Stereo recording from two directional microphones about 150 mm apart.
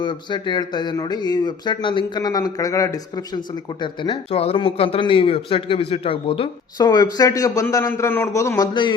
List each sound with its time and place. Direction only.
0.0 s speech: 30° left (ahead or behind)
6.7 s a man's voice: 25° left (ahead or behind)